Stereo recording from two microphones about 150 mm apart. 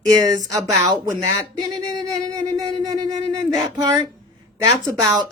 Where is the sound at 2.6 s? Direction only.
25° right (ahead or behind).